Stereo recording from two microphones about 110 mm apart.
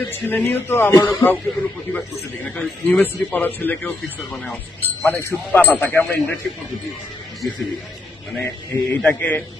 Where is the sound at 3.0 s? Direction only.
15° left (ahead or behind).